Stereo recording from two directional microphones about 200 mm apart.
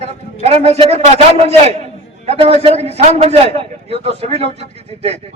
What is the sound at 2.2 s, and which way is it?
A man's voice, 30° right (ahead or behind).